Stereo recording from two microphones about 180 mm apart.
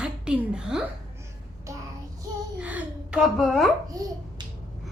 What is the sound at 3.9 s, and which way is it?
Babbling, 20° right (ahead or behind).